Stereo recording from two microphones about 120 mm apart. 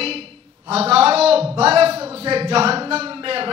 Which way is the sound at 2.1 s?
55° right (ahead or behind).